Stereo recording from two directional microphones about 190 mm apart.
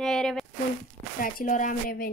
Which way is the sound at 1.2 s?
45° left (ahead or behind).